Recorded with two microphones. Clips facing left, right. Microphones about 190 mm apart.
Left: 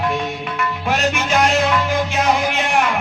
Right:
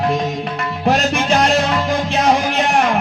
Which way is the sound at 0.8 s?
35° right (ahead or behind).